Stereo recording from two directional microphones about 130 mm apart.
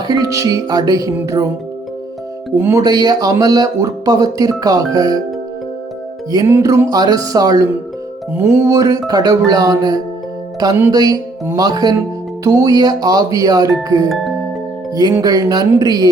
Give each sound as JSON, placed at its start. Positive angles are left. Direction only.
{"t": 0.1, "sound": "speech", "side_deg": -25}
{"t": 2.6, "sound": "speech", "side_deg": -20}
{"t": 2.8, "sound": "speech", "side_deg": -30}
{"t": 6.3, "sound": "speech", "side_deg": -25}
{"t": 8.3, "sound": "speech", "side_deg": -15}
{"t": 15.1, "sound": "speech", "side_deg": -30}